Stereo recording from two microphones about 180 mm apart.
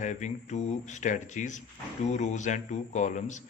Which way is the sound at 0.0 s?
40° left (ahead or behind).